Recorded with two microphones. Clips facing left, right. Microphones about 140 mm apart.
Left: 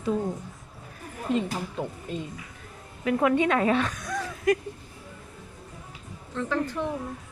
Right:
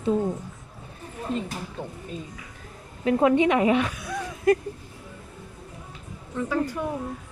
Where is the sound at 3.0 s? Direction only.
25° right (ahead or behind); by 4.2 s 10° right (ahead or behind).